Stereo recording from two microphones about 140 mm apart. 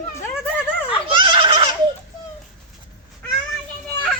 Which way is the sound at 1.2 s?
35° right (ahead or behind).